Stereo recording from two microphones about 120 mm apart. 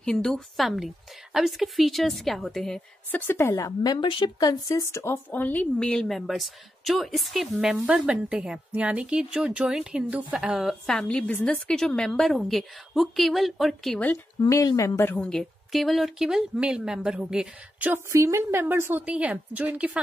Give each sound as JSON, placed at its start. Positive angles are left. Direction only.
{"t": 0.0, "sound": "a woman's voice", "side_deg": 5}
{"t": 3.1, "sound": "a woman's voice", "side_deg": 15}
{"t": 14.5, "sound": "speech", "side_deg": 30}
{"t": 15.2, "sound": "a woman's voice", "side_deg": 0}
{"t": 17.9, "sound": "a woman's voice", "side_deg": -25}